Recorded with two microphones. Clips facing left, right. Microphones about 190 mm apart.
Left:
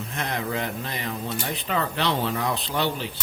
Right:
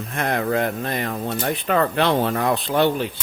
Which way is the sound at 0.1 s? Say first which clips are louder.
Right 8 dB; 55° right (ahead or behind).